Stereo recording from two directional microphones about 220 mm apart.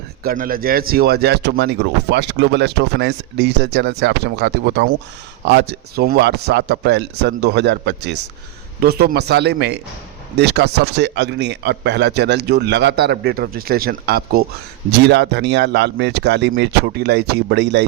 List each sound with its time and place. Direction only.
0.2 s speech: 40° right (ahead or behind)